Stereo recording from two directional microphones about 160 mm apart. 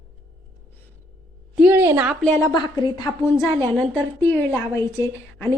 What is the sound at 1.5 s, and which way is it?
Speech, 10° right (ahead or behind).